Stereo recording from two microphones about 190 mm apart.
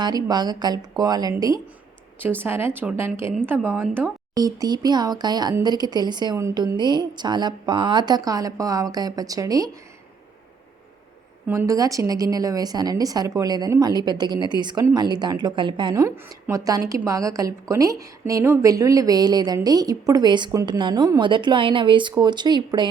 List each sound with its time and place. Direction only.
0.0 s a woman's voice: 20° right (ahead or behind)
4.4 s a woman's voice: 20° right (ahead or behind)
11.4 s a woman's voice: 15° right (ahead or behind)